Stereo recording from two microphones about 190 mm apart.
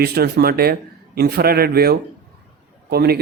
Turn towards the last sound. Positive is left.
turn(degrees=-55)  # may be behind; listen again after turning